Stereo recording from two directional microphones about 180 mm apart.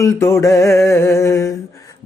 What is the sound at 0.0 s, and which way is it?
Mantra, 15° left (ahead or behind).